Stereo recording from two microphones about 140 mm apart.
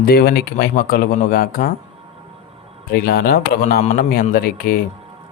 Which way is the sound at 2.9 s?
90° left.